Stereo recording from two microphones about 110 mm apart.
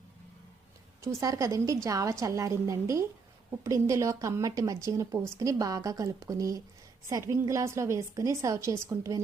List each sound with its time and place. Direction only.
1.0 s speech: 30° right (ahead or behind)